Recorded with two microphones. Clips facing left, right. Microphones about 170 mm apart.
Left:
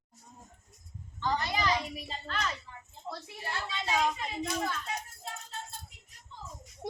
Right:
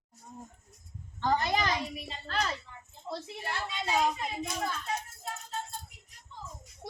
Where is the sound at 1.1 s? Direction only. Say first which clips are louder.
Right 3 dB; 50° right (ahead or behind).